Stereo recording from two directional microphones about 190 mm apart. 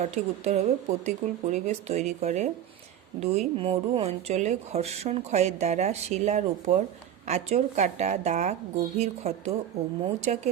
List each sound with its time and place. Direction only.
0.0 s speech: 35° right (ahead or behind)